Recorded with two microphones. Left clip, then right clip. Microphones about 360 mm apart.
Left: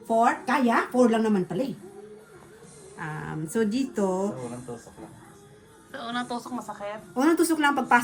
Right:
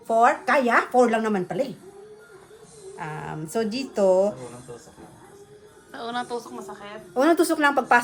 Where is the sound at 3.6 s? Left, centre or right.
Right.